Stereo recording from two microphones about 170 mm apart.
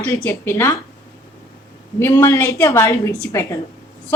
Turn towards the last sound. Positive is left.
turn(degrees=15)  # may be behind; listen again after turning